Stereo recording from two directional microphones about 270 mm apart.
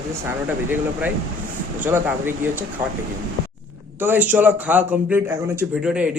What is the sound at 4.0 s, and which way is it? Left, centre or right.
A man's voice, centre.